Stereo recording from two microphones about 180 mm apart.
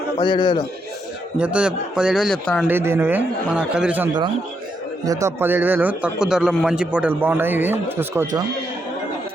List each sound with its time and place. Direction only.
0.2 s a man's voice: 25° left (ahead or behind)
1.4 s speech: 5° right (ahead or behind)
2.6 s a man's voice: 10° right (ahead or behind)